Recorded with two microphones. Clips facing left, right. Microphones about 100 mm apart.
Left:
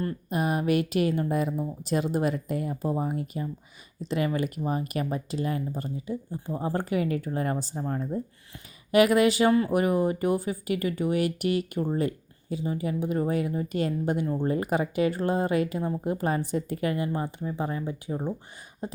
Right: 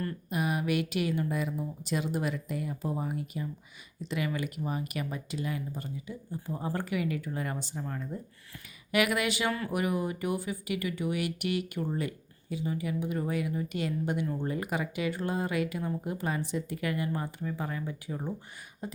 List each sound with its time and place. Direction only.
0.3 s speech: 40° left (ahead or behind)